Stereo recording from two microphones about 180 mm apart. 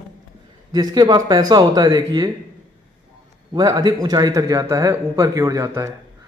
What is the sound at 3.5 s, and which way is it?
Speech, 20° right (ahead or behind).